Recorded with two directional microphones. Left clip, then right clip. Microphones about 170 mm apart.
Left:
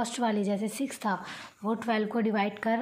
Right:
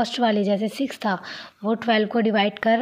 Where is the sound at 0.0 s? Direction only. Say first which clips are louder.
Right 8 dB; 30° right (ahead or behind).